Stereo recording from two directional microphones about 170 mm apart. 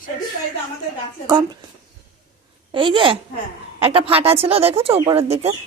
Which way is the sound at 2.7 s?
30° right (ahead or behind).